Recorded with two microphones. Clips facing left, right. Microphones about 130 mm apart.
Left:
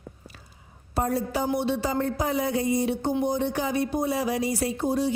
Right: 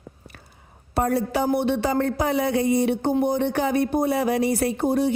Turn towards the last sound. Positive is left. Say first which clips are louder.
# right 4 dB
turn(degrees=-60)  # may be behind; listen again after turning